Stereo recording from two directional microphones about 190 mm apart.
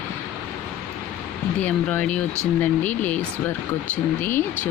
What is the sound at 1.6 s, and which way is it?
Speech, 5° left (ahead or behind).